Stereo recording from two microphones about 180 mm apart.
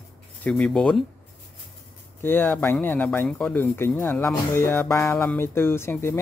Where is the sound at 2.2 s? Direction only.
10° left (ahead or behind).